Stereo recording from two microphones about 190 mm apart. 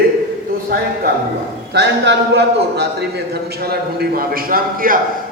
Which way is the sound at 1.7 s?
65° right (ahead or behind).